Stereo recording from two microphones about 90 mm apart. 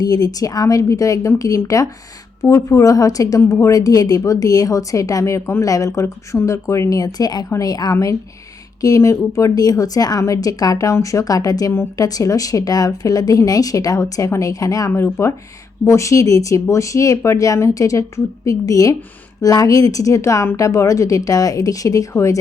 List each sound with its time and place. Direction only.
0.0 s a woman's voice: 45° left (ahead or behind)